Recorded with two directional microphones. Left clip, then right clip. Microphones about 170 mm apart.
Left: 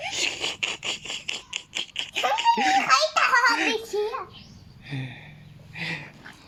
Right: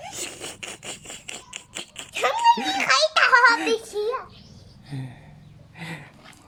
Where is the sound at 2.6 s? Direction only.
25° right (ahead or behind).